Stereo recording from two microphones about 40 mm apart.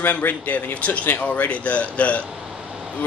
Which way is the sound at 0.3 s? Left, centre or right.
Left.